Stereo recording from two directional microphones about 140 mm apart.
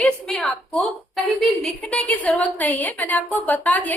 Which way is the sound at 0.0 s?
5° left (ahead or behind).